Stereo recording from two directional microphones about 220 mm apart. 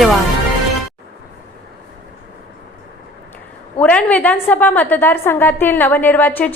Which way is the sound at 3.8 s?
5° left (ahead or behind).